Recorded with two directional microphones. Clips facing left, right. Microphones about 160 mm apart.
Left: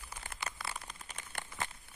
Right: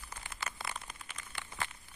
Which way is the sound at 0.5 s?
30° left (ahead or behind).